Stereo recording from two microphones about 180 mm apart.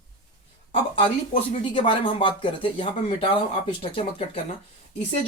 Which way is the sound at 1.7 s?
30° left (ahead or behind).